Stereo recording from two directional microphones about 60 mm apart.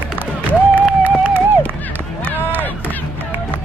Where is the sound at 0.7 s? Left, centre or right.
Right.